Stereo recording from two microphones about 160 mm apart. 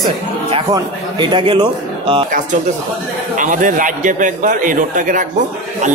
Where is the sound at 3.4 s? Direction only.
55° right (ahead or behind).